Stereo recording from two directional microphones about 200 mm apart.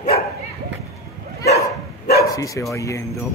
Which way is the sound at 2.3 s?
15° left (ahead or behind).